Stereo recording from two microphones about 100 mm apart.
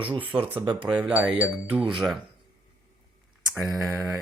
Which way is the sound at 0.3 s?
10° right (ahead or behind).